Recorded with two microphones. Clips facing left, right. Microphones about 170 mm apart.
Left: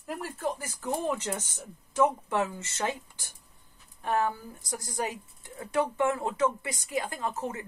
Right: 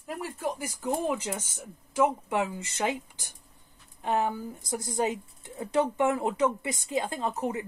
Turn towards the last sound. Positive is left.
turn(degrees=-15)  # may be behind; listen again after turning